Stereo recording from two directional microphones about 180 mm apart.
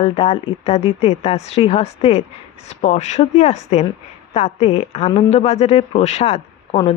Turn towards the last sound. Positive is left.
turn(degrees=30)  # may be behind; listen again after turning